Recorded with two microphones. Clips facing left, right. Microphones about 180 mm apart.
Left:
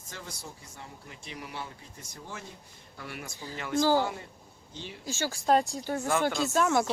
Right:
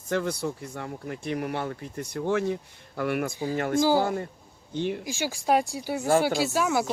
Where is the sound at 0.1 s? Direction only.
65° right (ahead or behind).